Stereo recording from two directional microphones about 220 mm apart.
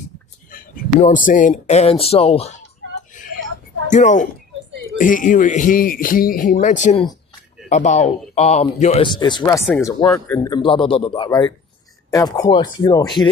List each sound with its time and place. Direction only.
0.5 s a sound: 40° left (ahead or behind)
0.9 s speech: 35° left (ahead or behind)
3.8 s a woman's voice: 35° left (ahead or behind)
9.0 s speech: 20° left (ahead or behind)
9.6 s speech: 5° left (ahead or behind)